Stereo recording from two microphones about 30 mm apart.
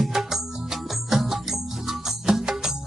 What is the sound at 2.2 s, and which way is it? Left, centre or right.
Music, centre.